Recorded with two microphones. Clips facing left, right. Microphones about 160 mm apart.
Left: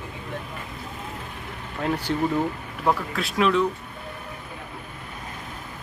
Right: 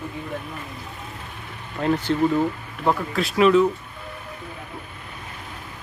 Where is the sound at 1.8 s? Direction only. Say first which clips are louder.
Right 4 dB; 5° left (ahead or behind).